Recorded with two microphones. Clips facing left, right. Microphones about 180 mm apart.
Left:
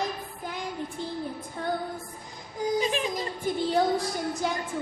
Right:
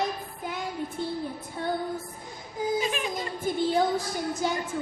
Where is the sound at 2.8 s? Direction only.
35° left (ahead or behind).